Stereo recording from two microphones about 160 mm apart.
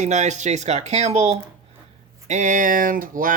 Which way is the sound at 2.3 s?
50° right (ahead or behind).